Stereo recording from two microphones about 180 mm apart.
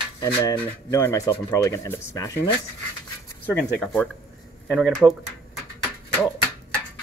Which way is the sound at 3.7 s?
5° left (ahead or behind).